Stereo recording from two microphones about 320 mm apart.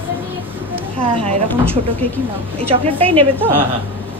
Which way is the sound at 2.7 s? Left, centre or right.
Centre.